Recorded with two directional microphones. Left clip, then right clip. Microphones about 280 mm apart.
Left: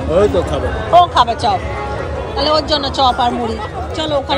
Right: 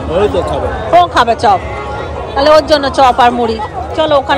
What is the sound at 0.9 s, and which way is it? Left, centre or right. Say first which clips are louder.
Speech: right 2 dB; right.